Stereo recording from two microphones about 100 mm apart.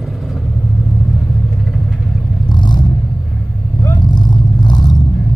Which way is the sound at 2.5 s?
45° left (ahead or behind).